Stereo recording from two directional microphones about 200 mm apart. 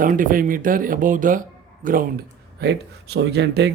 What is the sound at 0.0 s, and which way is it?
Speech, 45° right (ahead or behind).